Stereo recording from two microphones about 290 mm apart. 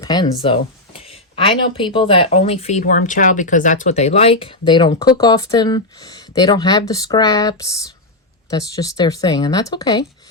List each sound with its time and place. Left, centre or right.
0.0 s speech: centre